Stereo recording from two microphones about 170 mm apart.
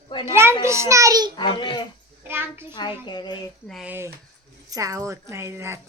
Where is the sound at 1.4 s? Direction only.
30° left (ahead or behind).